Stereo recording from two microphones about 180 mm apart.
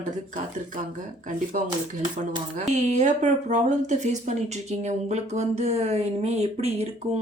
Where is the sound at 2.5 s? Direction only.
40° right (ahead or behind).